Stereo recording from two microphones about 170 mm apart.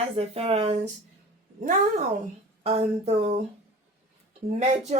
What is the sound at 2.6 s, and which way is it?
Speech, 35° right (ahead or behind).